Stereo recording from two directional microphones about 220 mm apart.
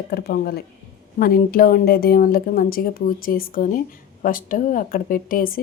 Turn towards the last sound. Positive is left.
turn(degrees=40)  # may be behind; listen again after turning